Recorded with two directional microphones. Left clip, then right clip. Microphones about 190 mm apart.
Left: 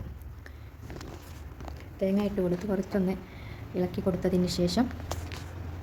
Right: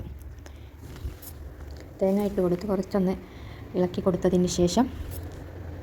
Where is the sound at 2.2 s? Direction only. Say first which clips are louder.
Right 4 dB; 10° right (ahead or behind).